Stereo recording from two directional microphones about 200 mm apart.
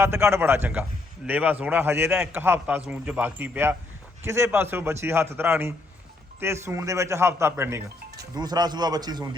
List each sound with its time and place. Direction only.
0.0 s a man's voice: 15° right (ahead or behind)